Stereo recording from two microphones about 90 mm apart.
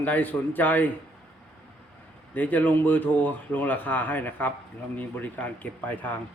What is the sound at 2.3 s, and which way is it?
Speech, 20° left (ahead or behind).